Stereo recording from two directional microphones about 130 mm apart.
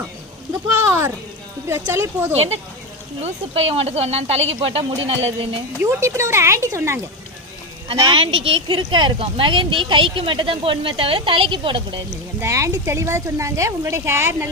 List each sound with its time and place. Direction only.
0.8 s a sound: 20° right (ahead or behind)
1.6 s speech: 20° right (ahead or behind)
2.3 s speech: 50° right (ahead or behind)
5.8 s speech: 20° right (ahead or behind)
8.0 s speech: 45° right (ahead or behind)
12.4 s speech: 25° right (ahead or behind)